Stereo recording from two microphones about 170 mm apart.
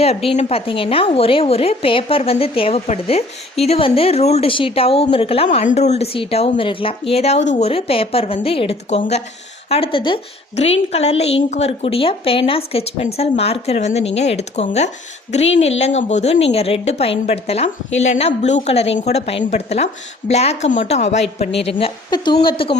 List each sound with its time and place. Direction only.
0.0 s a woman's voice: 35° left (ahead or behind)
5.5 s a woman's voice: 45° left (ahead or behind)